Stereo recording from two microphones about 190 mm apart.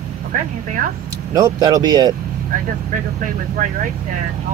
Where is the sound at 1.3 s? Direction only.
20° right (ahead or behind).